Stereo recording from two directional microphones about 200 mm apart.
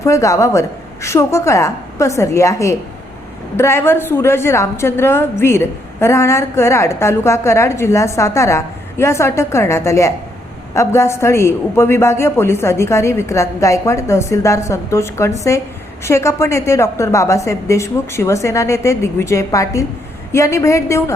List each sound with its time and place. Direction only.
0.0 s a woman's voice: 15° left (ahead or behind)